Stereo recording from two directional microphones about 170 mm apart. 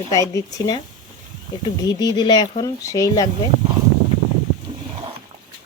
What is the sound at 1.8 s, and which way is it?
Speech, 25° left (ahead or behind).